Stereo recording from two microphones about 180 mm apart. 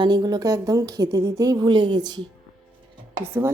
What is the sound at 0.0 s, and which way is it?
A woman's voice, 25° right (ahead or behind).